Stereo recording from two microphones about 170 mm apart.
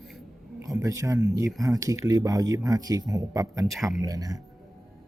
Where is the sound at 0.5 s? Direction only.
20° right (ahead or behind).